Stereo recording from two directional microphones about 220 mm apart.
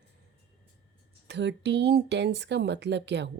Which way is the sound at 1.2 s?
55° right (ahead or behind).